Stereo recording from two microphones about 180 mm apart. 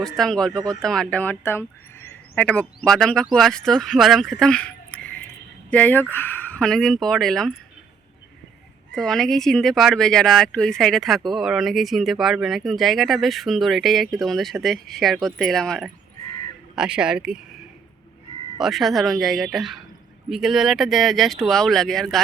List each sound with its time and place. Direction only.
0.0 s speech: centre (ahead or behind)
8.9 s speech: centre (ahead or behind)
18.6 s speech: centre (ahead or behind)